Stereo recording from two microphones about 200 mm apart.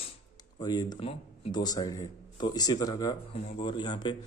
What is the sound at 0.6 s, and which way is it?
Speech, 20° left (ahead or behind).